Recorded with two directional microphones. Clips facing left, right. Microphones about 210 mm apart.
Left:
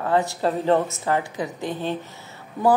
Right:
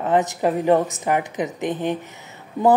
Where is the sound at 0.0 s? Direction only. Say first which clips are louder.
Right 2 dB; 20° right (ahead or behind).